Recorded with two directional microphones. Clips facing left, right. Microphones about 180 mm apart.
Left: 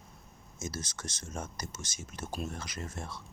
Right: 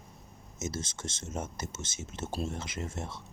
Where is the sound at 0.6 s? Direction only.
25° right (ahead or behind).